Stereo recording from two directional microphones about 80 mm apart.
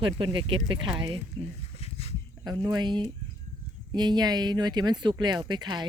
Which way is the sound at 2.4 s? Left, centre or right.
Right.